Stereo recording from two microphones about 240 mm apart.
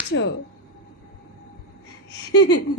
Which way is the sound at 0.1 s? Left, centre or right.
Left.